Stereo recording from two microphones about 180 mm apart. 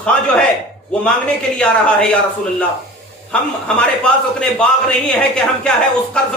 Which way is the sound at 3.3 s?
5° left (ahead or behind).